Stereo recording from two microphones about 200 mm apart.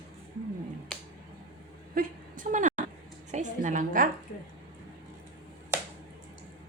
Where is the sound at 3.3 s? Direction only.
40° right (ahead or behind).